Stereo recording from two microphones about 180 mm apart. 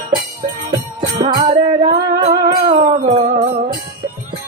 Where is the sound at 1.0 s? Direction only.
25° right (ahead or behind).